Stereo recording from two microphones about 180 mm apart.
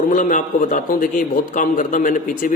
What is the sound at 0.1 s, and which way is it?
A man's voice, 45° left (ahead or behind).